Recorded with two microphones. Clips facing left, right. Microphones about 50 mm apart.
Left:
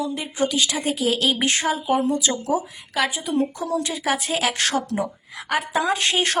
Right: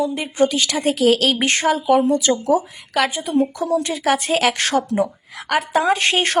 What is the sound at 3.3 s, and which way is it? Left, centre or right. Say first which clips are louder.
Speech: right 5 dB; right.